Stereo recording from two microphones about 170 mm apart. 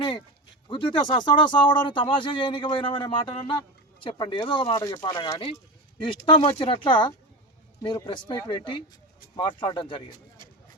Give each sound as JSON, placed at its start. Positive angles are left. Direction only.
{"t": 0.7, "sound": "speech", "side_deg": 30}
{"t": 4.7, "sound": "speech", "side_deg": 20}
{"t": 5.0, "sound": "speech", "side_deg": 30}